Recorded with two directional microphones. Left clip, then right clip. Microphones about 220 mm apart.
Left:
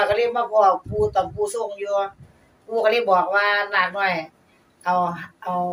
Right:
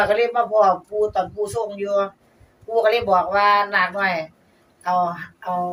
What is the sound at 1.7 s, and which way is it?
A woman's voice, centre (ahead or behind).